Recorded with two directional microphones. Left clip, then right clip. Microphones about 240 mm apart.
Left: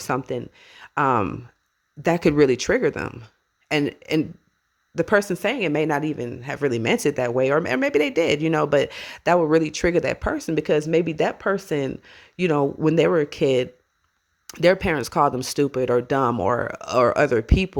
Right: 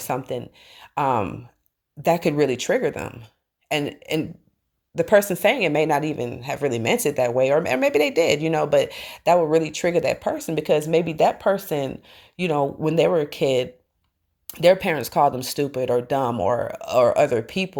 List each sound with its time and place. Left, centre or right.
0.0 s a woman's voice: left